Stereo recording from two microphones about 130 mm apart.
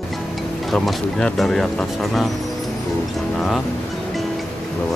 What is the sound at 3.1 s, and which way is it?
Music, centre (ahead or behind).